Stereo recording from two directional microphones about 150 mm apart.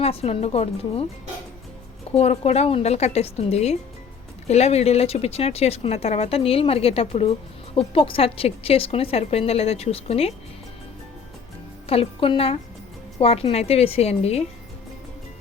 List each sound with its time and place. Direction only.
0.0 s a woman's voice: 40° left (ahead or behind)
2.1 s a woman's voice: 45° left (ahead or behind)
11.9 s a woman's voice: 40° left (ahead or behind)